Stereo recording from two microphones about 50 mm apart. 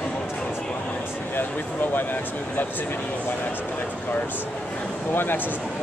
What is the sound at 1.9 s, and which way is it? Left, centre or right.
Speech, left.